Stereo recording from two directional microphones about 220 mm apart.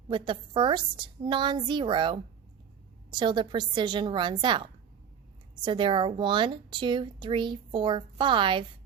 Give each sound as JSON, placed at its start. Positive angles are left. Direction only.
{"t": 0.1, "sound": "a woman's voice", "side_deg": -20}